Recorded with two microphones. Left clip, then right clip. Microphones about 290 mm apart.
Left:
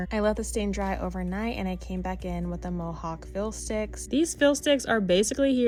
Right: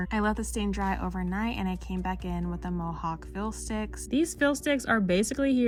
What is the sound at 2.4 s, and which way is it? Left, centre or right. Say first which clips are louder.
Speech: left 1 dB; right.